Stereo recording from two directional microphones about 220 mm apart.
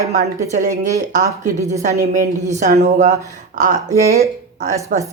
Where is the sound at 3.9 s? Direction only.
15° right (ahead or behind).